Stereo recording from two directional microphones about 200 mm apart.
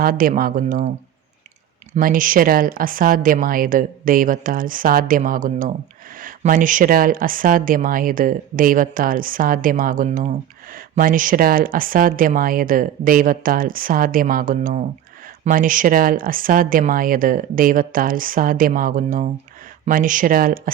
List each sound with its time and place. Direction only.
0.0 s speech: 45° right (ahead or behind)
1.9 s speech: 45° right (ahead or behind)